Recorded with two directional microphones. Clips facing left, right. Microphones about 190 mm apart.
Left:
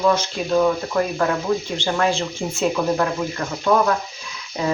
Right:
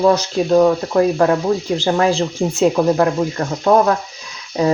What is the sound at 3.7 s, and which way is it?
Speech, 50° right (ahead or behind).